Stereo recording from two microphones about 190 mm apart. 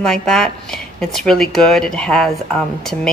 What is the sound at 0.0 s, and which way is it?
A woman's voice, 5° left (ahead or behind).